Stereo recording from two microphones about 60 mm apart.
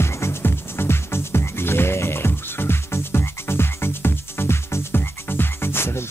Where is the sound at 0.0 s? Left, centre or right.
Left.